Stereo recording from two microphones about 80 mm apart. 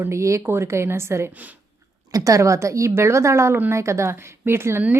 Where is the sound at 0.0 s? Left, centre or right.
Right.